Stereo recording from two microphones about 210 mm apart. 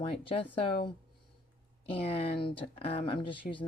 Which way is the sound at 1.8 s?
25° left (ahead or behind).